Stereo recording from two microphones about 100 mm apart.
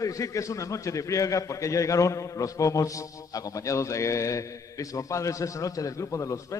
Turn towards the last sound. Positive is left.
turn(degrees=30)  # may be behind; listen again after turning